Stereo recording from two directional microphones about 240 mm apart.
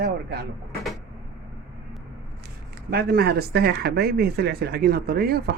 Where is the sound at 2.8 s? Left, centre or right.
Right.